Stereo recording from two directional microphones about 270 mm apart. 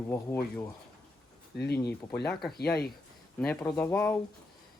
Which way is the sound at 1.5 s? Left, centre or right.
Left.